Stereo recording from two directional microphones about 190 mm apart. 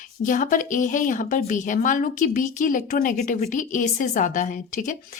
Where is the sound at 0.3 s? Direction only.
45° left (ahead or behind).